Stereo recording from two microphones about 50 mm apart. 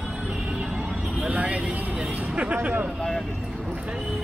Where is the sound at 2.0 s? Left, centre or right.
Right.